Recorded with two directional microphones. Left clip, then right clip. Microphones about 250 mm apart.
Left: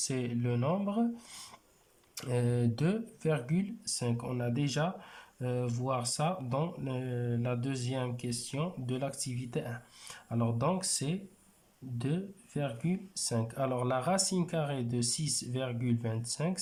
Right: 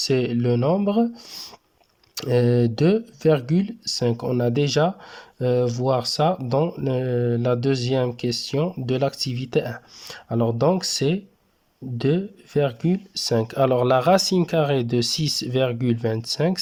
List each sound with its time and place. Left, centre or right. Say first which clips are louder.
0.1 s speech: right 14 dB; right